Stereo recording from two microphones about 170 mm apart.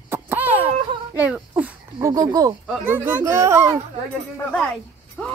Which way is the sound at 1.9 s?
20° right (ahead or behind).